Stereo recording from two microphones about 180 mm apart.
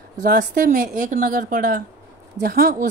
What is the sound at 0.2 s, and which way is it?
A woman's voice, 50° right (ahead or behind).